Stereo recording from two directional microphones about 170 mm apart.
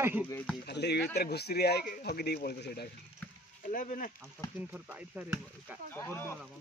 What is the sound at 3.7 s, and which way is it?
Speech, 50° left (ahead or behind).